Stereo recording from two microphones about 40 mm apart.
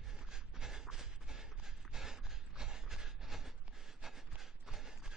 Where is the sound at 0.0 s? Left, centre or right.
Centre.